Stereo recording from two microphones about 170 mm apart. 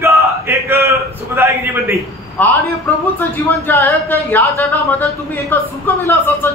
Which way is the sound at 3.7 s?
15° left (ahead or behind).